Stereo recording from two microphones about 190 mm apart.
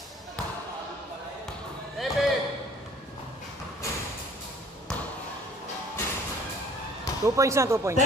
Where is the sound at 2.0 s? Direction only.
Centre (ahead or behind).